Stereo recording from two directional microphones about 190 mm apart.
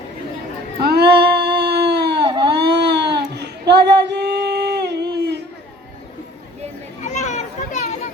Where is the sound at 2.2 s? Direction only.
25° right (ahead or behind).